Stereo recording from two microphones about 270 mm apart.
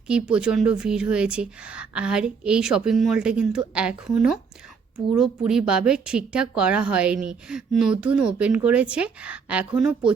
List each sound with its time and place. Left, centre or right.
0.1 s a woman's voice: centre